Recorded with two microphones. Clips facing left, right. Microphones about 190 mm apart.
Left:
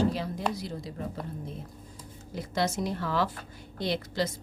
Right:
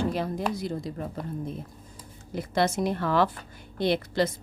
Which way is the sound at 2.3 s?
60° right (ahead or behind).